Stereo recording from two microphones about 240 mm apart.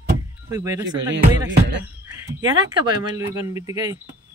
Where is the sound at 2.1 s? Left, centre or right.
Centre.